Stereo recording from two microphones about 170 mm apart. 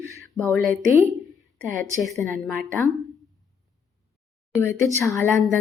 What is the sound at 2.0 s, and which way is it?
Speech, centre (ahead or behind).